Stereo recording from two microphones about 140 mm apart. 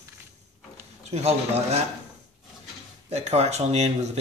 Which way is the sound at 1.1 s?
50° right (ahead or behind).